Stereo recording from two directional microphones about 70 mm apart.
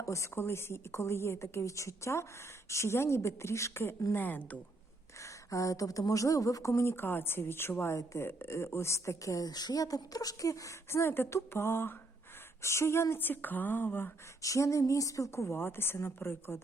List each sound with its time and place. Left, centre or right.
0.0 s a woman's voice: left
4.1 s speech: left
5.2 s a woman's voice: left
14.4 s a woman's voice: left